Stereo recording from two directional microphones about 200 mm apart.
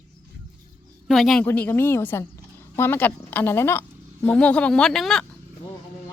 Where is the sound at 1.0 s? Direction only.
Centre (ahead or behind).